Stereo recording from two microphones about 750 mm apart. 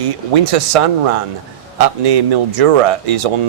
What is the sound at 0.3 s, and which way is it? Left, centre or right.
Speech, right.